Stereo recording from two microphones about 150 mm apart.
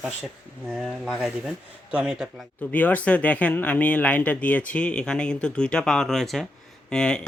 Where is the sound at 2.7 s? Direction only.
10° left (ahead or behind).